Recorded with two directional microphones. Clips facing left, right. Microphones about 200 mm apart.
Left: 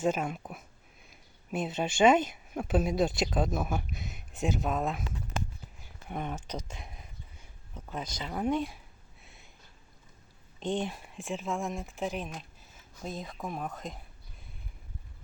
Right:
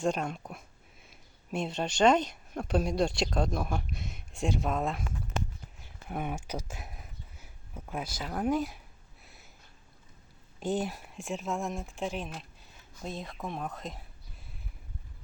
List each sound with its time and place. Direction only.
0.0 s speech: 5° left (ahead or behind)
5.8 s a sound: 5° right (ahead or behind)
10.6 s speech: 5° right (ahead or behind)